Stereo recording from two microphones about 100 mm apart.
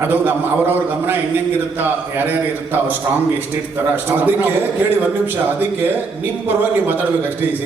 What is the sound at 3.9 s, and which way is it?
Speech, 20° right (ahead or behind).